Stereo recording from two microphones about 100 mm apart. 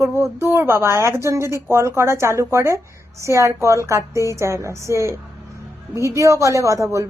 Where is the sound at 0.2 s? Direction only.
30° right (ahead or behind).